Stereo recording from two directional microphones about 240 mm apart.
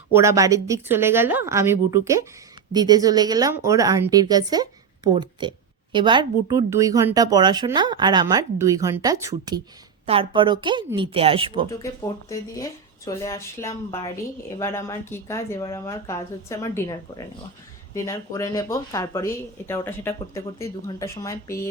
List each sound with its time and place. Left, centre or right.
0.1 s a woman's voice: centre
11.7 s speech: centre